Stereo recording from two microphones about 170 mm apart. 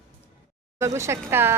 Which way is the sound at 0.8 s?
15° right (ahead or behind).